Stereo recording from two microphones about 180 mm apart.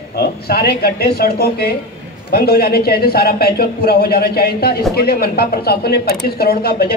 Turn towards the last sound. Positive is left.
turn(degrees=60)  # may be behind; listen again after turning